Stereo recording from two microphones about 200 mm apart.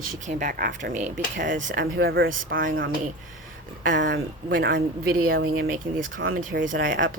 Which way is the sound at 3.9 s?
65° right (ahead or behind).